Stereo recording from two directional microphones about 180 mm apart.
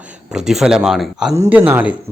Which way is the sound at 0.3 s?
5° right (ahead or behind).